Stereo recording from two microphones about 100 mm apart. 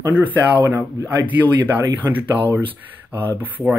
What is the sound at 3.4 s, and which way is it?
Speech, 20° right (ahead or behind).